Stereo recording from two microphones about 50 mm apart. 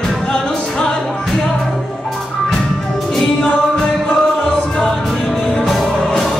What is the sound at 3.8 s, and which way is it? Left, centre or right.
Music, centre.